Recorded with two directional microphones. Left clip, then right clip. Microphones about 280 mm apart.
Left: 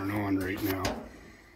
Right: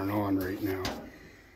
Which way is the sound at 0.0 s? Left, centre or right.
Centre.